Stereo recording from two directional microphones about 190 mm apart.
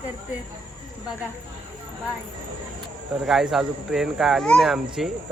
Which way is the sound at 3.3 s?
Centre (ahead or behind).